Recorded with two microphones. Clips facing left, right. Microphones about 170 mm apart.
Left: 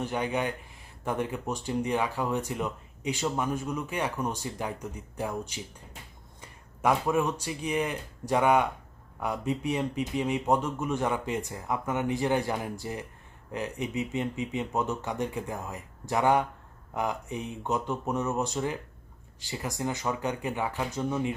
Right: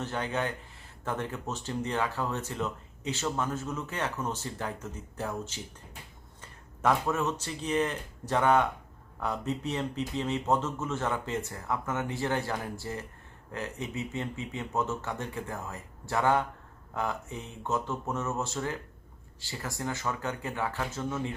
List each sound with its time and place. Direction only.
0.0 s speech: 15° left (ahead or behind)